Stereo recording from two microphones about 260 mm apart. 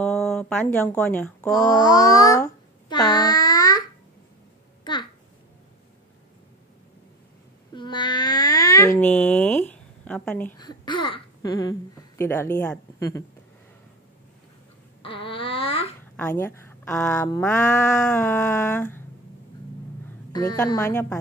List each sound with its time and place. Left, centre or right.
0.0 s speech: centre
1.7 s babbling: centre
3.1 s child singing: centre
7.7 s a sound: centre
12.2 s speech: centre
15.0 s babbling: centre
16.3 s speech: centre
20.5 s speech: centre